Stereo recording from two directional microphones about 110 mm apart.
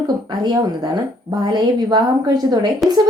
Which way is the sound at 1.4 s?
40° right (ahead or behind).